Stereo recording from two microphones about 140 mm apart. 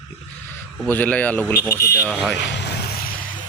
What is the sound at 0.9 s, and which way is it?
Speech, 10° left (ahead or behind).